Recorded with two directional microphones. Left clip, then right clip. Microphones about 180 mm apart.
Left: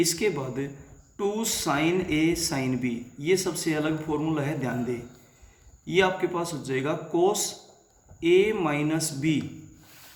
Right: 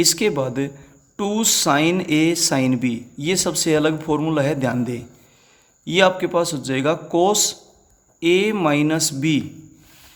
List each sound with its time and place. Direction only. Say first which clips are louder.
0.0 s speech: right 7 dB; 50° right (ahead or behind)